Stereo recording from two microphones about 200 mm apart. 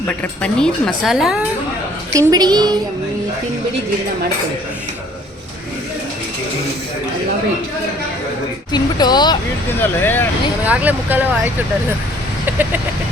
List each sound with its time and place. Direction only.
0.2 s speech: 5° left (ahead or behind)
2.1 s a woman's voice: 20° right (ahead or behind)
8.7 s speech: 20° left (ahead or behind)
10.0 s speech: 10° left (ahead or behind)
10.7 s speech: 10° right (ahead or behind)
12.5 s chicken: 10° right (ahead or behind)